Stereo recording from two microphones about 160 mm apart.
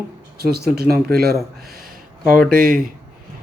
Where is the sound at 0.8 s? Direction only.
75° right (ahead or behind).